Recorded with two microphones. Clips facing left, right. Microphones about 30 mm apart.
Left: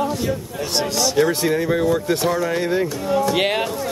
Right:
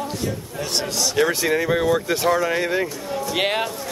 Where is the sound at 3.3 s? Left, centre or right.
Centre.